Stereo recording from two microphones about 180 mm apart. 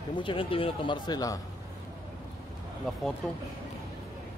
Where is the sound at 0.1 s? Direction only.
25° left (ahead or behind).